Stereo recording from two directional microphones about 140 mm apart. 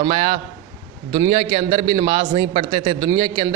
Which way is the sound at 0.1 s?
45° right (ahead or behind).